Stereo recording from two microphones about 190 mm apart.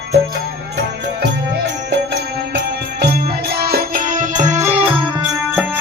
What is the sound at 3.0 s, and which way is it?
Music, 55° right (ahead or behind).